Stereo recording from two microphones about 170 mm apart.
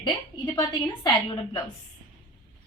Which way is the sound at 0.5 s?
25° left (ahead or behind).